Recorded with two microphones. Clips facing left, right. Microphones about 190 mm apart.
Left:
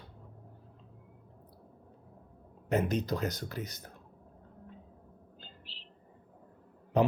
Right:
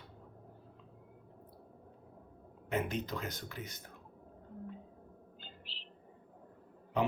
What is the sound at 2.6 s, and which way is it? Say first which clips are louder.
Speech: left 6 dB; 40° left (ahead or behind).